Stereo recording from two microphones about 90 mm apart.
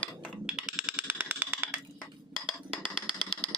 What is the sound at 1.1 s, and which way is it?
Music, 20° right (ahead or behind).